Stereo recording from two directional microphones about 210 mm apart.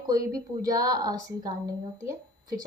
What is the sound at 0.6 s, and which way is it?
A woman's voice, 15° right (ahead or behind).